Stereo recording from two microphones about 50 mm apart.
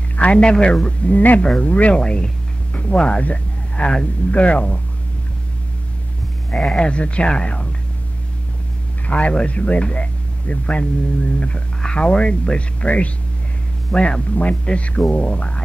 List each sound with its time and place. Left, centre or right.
0.1 s a sound: left
0.4 s speech: centre
1.1 s speech: left
2.0 s speech: centre
3.2 s a sound: left
3.8 s a man's voice: centre
4.3 s speech: left
6.5 s speech: centre
9.0 s speech: left
13.9 s a man's voice: centre
14.3 s speech: left